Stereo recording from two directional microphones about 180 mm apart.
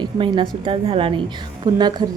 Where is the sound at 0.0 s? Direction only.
25° right (ahead or behind).